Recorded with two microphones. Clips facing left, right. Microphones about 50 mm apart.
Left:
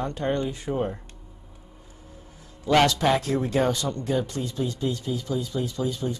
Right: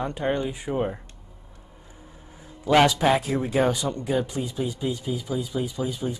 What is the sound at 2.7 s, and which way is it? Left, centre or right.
Speech, centre.